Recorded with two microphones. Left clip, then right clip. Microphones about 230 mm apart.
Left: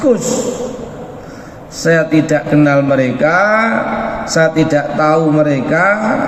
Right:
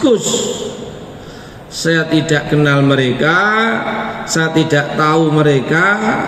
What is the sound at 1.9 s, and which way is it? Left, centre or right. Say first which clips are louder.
Speech: left 2 dB; right.